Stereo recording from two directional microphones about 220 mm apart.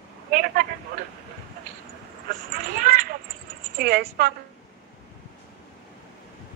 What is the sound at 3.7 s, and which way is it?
Speech, 45° right (ahead or behind).